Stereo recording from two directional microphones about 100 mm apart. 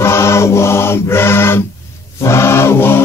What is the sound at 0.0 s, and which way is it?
Chant, 25° left (ahead or behind).